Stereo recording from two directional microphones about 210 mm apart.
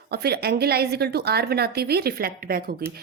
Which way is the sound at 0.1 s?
50° right (ahead or behind).